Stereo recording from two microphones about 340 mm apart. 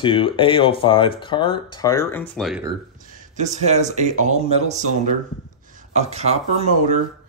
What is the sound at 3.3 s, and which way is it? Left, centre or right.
Speech, centre.